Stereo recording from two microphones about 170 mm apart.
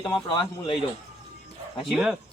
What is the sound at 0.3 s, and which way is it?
Speech, 30° left (ahead or behind).